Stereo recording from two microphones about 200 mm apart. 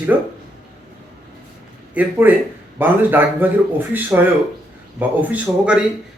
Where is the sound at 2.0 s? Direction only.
10° right (ahead or behind).